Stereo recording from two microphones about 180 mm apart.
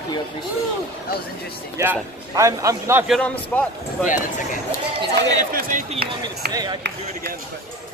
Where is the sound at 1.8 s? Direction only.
15° right (ahead or behind).